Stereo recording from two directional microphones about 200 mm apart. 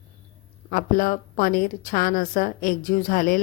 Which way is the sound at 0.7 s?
40° left (ahead or behind).